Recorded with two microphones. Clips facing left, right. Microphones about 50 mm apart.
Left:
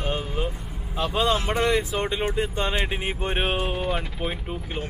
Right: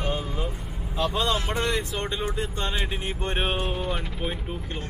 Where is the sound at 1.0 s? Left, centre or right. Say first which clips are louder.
Left 2 dB; centre.